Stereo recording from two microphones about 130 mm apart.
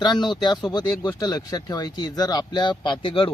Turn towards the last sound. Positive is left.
turn(degrees=40)  # may be behind; listen again after turning